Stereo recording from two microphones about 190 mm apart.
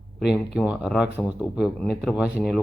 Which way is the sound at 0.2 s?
5° right (ahead or behind).